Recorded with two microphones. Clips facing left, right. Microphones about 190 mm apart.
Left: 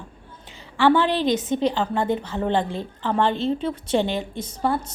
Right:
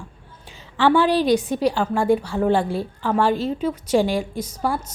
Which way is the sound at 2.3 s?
10° right (ahead or behind).